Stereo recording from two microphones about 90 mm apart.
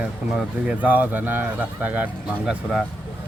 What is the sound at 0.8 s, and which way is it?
Speech, 20° right (ahead or behind).